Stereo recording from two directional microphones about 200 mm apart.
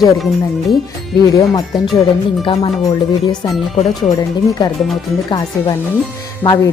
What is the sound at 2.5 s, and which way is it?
Speech, 25° left (ahead or behind).